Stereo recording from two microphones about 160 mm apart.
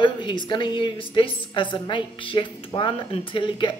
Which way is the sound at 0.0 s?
30° left (ahead or behind).